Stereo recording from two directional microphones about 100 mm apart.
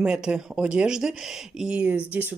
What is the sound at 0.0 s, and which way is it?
Speech, 10° right (ahead or behind).